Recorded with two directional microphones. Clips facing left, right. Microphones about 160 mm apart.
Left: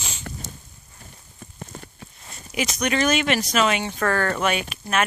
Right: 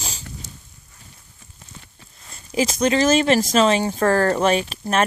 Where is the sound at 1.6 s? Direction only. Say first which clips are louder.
Left 7 dB; 50° left (ahead or behind).